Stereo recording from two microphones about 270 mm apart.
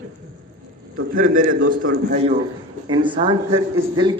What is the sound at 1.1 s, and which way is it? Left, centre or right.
A man's voice, right.